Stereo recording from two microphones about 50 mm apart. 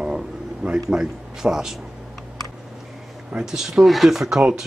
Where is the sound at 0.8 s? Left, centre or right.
Centre.